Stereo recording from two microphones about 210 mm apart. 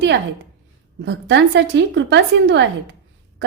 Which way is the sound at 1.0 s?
60° right (ahead or behind).